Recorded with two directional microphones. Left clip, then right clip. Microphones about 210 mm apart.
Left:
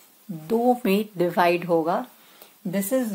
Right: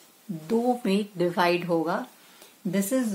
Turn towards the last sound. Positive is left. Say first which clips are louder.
# left 2 dB
turn(degrees=25)  # may be behind; listen again after turning